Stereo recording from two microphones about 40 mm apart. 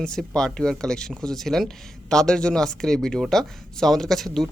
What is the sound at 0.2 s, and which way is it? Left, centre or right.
Speech, centre.